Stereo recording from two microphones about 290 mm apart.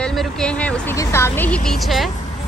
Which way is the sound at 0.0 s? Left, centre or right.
Centre.